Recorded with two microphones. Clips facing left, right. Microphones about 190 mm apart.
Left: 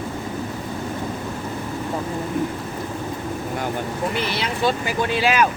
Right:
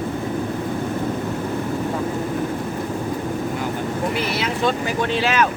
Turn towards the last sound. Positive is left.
turn(degrees=10)  # may be behind; listen again after turning